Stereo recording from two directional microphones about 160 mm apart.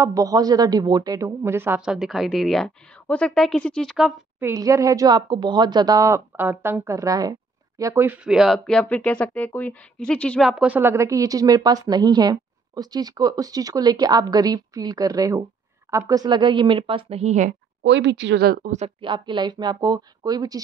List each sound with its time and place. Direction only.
0.0 s speech: 20° right (ahead or behind); by 4.1 s centre (ahead or behind)
4.4 s speech: 20° right (ahead or behind); by 17.6 s 50° right (ahead or behind)
17.8 s speech: 90° right
18.9 s speech: 30° right (ahead or behind)